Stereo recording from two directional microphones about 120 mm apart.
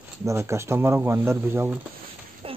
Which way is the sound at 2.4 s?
50° right (ahead or behind).